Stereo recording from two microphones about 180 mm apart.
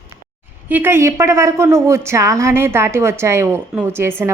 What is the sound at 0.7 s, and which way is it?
A woman's voice, 10° right (ahead or behind).